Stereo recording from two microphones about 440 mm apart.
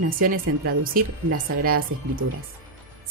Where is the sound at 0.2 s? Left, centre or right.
Centre.